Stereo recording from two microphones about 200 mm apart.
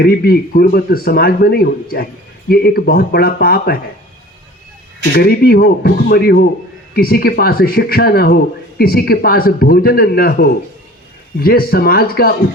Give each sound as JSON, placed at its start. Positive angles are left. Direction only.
{"t": 0.0, "sound": "speech", "side_deg": 50}
{"t": 5.1, "sound": "speech", "side_deg": 50}